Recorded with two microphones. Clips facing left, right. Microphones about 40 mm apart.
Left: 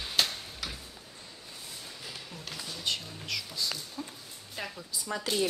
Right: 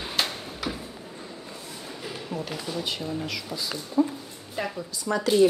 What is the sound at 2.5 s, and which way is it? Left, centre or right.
Speech, right.